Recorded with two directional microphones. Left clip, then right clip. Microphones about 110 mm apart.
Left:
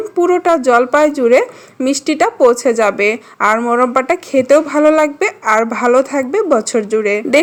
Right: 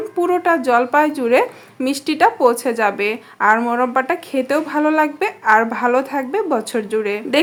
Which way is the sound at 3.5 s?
20° left (ahead or behind).